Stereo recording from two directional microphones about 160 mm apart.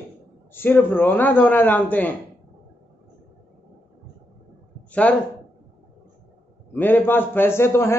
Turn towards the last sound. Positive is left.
turn(degrees=15)  # may be behind; listen again after turning